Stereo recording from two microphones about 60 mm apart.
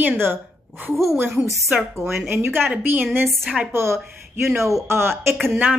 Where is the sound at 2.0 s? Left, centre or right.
Right.